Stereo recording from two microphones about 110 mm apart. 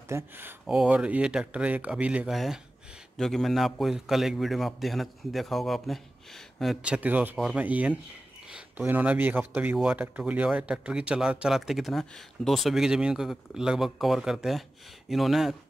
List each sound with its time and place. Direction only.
0.1 s speech: 20° right (ahead or behind)
0.7 s speech: 10° right (ahead or behind)
8.5 s a sound: 10° right (ahead or behind)
8.8 s speech: 15° right (ahead or behind)